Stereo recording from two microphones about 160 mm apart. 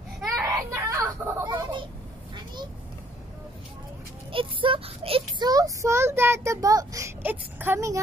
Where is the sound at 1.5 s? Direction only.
30° right (ahead or behind).